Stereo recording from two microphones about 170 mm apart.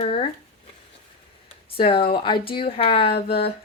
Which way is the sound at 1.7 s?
30° left (ahead or behind).